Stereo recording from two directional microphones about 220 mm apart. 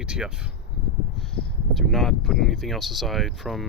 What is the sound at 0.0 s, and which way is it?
Speech, 5° right (ahead or behind).